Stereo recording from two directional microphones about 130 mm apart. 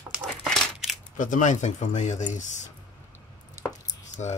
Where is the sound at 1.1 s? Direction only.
80° left.